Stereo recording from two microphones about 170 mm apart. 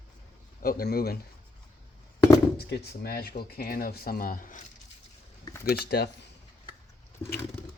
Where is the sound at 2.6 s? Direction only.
70° left (ahead or behind); by 4.6 s 50° left (ahead or behind).